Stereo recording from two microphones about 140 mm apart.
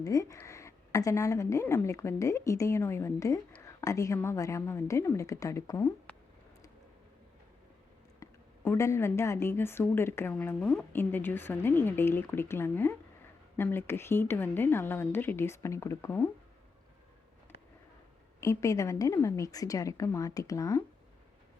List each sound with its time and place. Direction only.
0.0 s a woman's voice: 25° left (ahead or behind)
8.2 s a woman's voice: 20° left (ahead or behind)
18.3 s a woman's voice: 20° left (ahead or behind)